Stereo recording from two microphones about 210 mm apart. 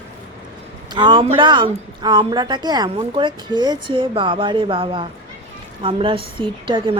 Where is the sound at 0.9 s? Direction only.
20° right (ahead or behind).